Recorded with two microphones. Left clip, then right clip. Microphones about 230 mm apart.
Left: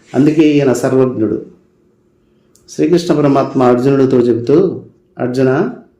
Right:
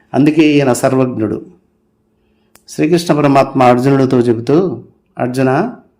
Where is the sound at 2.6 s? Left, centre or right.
Right.